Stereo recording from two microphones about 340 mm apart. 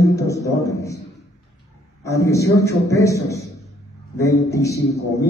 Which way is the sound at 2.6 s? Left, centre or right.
Centre.